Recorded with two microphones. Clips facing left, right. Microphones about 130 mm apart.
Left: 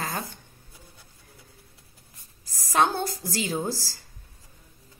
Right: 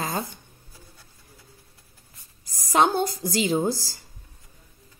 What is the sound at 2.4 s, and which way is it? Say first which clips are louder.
A woman's voice: right 2 dB; 15° right (ahead or behind).